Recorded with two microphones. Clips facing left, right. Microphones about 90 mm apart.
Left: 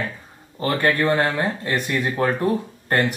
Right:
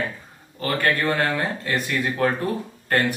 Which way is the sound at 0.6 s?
20° left (ahead or behind).